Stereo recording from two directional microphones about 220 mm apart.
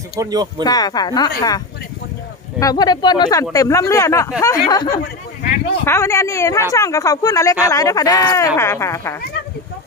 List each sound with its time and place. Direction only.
0.2 s speech: 15° right (ahead or behind)
0.6 s speech: 15° left (ahead or behind)